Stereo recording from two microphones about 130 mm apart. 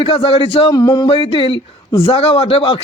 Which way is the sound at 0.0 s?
50° left (ahead or behind).